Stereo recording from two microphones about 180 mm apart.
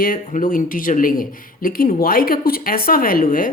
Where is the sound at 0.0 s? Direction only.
50° left (ahead or behind).